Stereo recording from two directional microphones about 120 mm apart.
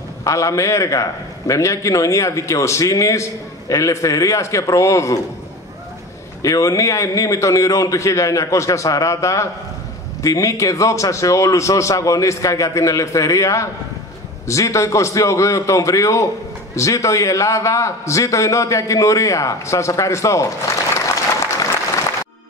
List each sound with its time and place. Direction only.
0.2 s a man's voice: 25° left (ahead or behind)
6.4 s a man's voice: 30° left (ahead or behind)